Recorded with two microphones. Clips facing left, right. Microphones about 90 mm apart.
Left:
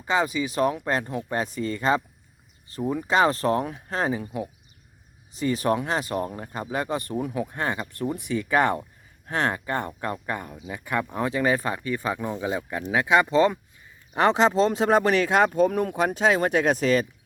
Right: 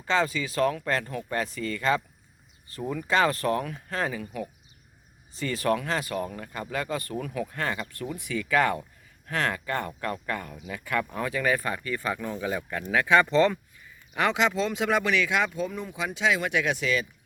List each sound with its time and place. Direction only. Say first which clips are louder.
0.0 s speech: left 2 dB; 15° left (ahead or behind)
5.3 s speech: left 3 dB; 20° left (ahead or behind)
14.1 s speech: left 5 dB; 35° left (ahead or behind)